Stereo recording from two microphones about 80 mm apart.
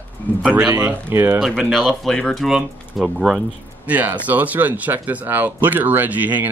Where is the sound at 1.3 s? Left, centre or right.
Centre.